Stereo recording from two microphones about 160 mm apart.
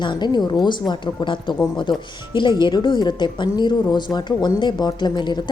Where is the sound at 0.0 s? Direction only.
30° left (ahead or behind).